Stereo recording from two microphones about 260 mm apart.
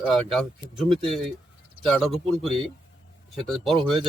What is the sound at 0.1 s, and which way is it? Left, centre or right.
Speech, centre.